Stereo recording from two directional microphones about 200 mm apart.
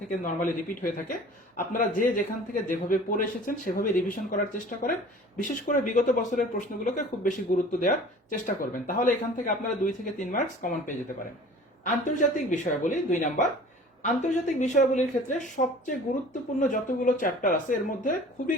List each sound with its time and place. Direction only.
0.1 s a man's voice: 40° left (ahead or behind)